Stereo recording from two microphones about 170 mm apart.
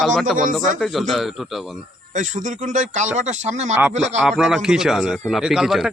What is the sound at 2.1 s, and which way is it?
Speech, 45° right (ahead or behind).